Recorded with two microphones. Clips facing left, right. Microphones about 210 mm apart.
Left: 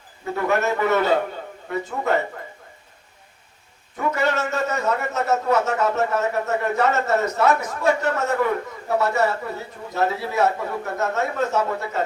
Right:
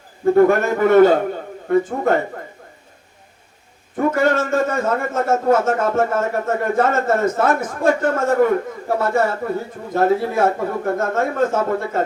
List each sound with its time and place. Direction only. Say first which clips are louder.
0.3 s a man's voice: right 9 dB; 50° right (ahead or behind)
3.9 s a man's voice: right 6 dB; 50° right (ahead or behind)